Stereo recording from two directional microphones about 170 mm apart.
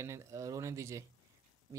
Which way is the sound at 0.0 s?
20° right (ahead or behind).